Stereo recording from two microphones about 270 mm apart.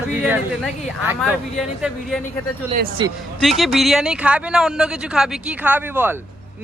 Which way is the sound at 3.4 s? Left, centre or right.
Centre.